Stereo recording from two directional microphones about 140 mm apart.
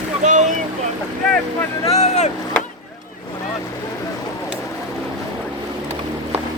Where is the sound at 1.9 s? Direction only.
50° left (ahead or behind).